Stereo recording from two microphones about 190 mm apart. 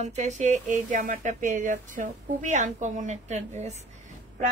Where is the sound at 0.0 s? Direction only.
35° right (ahead or behind).